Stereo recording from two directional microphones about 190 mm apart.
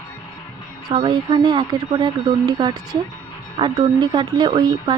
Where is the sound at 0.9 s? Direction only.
25° right (ahead or behind).